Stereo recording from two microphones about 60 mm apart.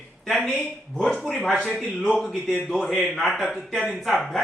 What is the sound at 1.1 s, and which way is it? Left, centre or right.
Speech, centre.